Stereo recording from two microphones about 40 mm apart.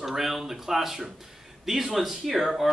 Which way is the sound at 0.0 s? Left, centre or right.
Centre.